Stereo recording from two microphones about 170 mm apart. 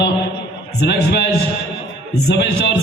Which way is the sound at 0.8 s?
75° left (ahead or behind).